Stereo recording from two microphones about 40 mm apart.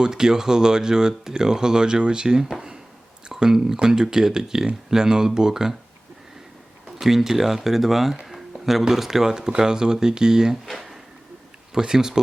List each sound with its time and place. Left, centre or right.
0.0 s speech: centre
7.0 s speech: centre
8.2 s a sound: centre
8.8 s speech: centre
10.7 s speech: centre
11.7 s speech: centre